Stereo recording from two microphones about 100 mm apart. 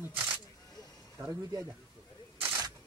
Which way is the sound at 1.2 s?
35° right (ahead or behind).